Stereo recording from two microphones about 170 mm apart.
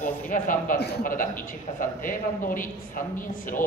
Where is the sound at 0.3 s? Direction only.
50° left (ahead or behind).